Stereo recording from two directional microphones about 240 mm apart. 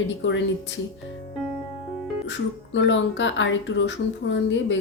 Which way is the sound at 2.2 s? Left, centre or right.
Left.